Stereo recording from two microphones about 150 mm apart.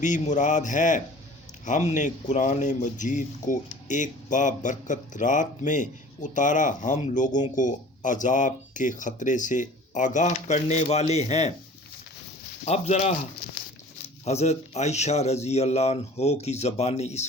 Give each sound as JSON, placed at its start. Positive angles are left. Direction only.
{"t": 0.0, "sound": "speech", "side_deg": 55}
{"t": 12.6, "sound": "speech", "side_deg": 50}
{"t": 14.3, "sound": "speech", "side_deg": 45}